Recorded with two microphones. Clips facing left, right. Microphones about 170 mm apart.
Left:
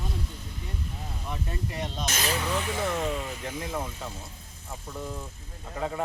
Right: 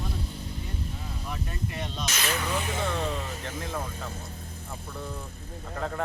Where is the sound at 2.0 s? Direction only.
45° left (ahead or behind).